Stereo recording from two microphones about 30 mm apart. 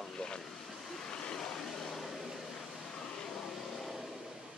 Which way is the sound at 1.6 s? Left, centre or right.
Centre.